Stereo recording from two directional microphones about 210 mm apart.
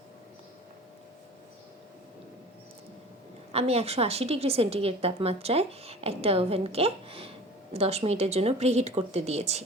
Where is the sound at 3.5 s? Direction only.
30° right (ahead or behind).